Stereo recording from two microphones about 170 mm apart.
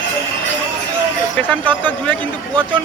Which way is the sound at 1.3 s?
10° left (ahead or behind).